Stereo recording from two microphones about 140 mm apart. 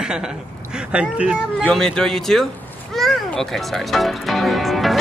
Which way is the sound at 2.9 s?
Centre (ahead or behind).